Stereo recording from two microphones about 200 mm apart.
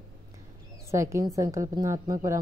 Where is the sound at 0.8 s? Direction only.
15° right (ahead or behind).